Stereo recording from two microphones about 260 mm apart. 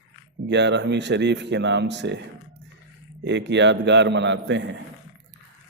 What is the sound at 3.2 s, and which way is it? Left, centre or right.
A man's voice, right.